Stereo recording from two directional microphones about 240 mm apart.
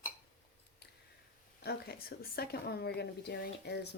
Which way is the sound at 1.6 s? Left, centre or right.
Left.